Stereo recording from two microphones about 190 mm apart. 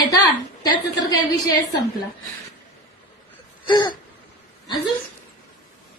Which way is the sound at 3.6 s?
25° left (ahead or behind).